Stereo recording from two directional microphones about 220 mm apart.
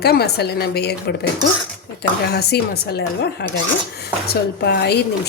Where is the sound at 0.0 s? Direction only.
45° left (ahead or behind).